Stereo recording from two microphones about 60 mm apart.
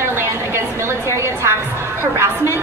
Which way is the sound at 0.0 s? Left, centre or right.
Right.